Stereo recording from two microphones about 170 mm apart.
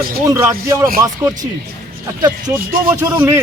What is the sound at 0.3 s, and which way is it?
Speech, 15° right (ahead or behind).